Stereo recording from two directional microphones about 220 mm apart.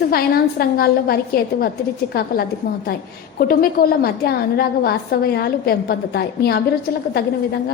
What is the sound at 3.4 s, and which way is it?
A woman's voice, 40° left (ahead or behind).